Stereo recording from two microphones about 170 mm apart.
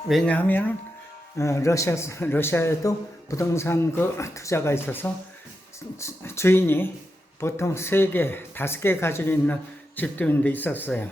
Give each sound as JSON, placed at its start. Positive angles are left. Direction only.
{"t": 0.1, "sound": "speech", "side_deg": 5}